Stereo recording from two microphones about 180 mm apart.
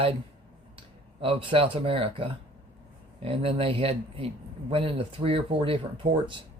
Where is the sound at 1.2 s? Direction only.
30° right (ahead or behind).